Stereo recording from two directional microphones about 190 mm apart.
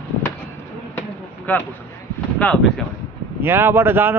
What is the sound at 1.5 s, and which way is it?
Speech, 10° left (ahead or behind).